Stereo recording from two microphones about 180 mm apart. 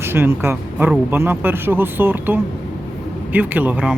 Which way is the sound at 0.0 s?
15° right (ahead or behind).